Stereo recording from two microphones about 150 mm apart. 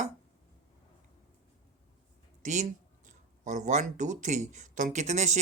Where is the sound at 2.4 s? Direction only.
55° right (ahead or behind).